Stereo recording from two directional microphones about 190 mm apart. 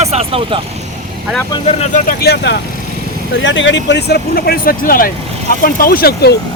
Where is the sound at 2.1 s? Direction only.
55° left (ahead or behind).